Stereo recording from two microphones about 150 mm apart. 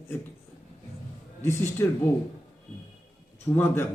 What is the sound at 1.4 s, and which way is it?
Speech, 15° left (ahead or behind).